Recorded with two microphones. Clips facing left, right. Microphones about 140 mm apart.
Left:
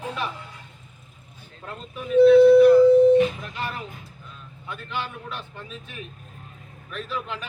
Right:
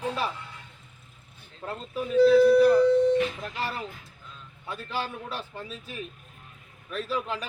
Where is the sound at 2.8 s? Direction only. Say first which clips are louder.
Left 6 dB; 25° left (ahead or behind).